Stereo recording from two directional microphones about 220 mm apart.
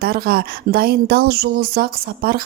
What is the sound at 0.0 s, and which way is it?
A woman's voice, 45° right (ahead or behind).